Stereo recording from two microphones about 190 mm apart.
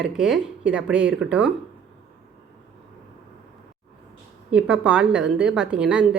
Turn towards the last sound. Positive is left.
turn(degrees=-5)  # may be behind; listen again after turning